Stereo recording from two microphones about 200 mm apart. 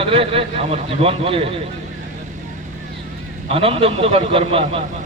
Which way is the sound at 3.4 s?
30° right (ahead or behind).